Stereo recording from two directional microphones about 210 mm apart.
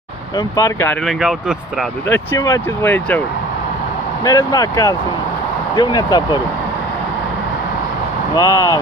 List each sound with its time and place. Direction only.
0.4 s speech: 20° left (ahead or behind)
0.8 s speech: centre (ahead or behind)
4.2 s speech: 15° left (ahead or behind)
8.4 s speech: 15° left (ahead or behind)